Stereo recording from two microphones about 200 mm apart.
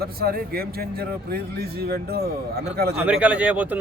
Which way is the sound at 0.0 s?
50° right (ahead or behind).